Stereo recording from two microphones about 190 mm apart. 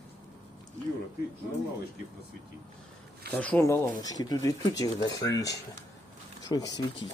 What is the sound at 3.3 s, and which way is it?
Speech, 10° left (ahead or behind).